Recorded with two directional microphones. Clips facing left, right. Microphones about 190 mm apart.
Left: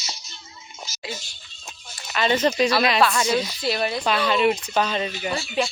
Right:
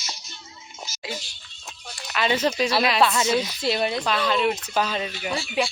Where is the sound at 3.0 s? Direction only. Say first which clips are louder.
Even; 25° right (ahead or behind).